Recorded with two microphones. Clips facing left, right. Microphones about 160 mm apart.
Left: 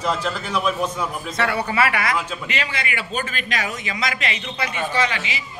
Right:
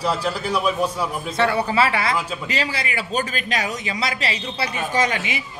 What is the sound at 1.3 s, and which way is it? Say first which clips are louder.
A man's voice: right 4 dB; 30° right (ahead or behind).